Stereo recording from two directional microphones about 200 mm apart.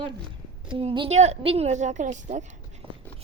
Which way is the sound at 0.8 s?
30° right (ahead or behind).